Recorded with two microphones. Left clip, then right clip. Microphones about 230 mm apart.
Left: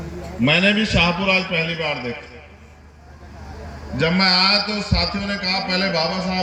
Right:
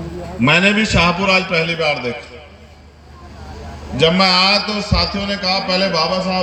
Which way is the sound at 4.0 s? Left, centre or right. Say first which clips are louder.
Right 4 dB; centre.